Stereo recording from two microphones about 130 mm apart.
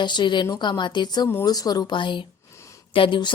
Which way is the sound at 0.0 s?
35° left (ahead or behind).